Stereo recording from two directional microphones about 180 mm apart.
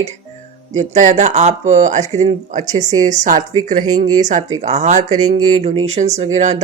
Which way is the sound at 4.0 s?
40° right (ahead or behind).